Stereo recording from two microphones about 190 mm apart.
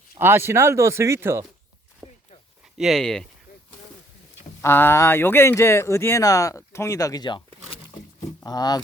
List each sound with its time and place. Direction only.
0.1 s speech: 10° right (ahead or behind)
2.0 s a sound: 10° right (ahead or behind)
2.7 s speech: centre (ahead or behind)
4.6 s speech: 10° left (ahead or behind)
8.4 s speech: 20° left (ahead or behind)